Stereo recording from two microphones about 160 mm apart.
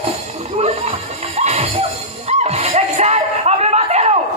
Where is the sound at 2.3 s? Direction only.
40° right (ahead or behind).